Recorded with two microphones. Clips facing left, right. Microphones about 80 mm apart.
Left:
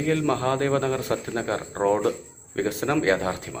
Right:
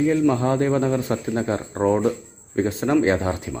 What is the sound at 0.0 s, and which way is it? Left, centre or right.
A man's voice, centre.